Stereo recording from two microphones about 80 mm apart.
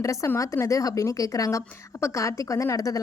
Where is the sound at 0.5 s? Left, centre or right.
Left.